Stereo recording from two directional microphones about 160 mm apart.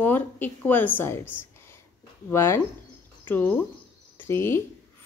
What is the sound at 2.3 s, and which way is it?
Speech, 15° left (ahead or behind).